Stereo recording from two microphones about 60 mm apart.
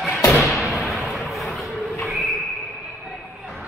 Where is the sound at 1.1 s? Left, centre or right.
Centre.